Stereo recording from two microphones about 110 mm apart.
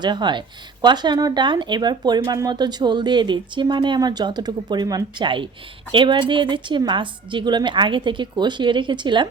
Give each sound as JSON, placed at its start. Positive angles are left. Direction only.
{"t": 0.0, "sound": "a woman's voice", "side_deg": -40}